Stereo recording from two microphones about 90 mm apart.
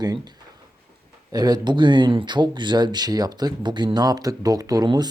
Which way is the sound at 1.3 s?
45° right (ahead or behind).